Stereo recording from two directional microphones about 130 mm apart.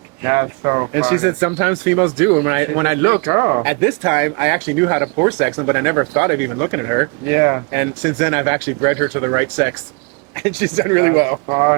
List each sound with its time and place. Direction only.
0.2 s speech: 20° right (ahead or behind)